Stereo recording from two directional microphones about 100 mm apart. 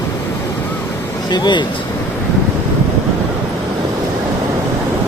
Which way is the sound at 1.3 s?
45° left (ahead or behind).